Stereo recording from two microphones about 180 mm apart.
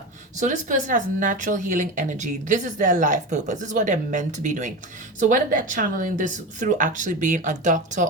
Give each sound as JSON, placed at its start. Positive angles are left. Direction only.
{"t": 0.3, "sound": "speech", "side_deg": -45}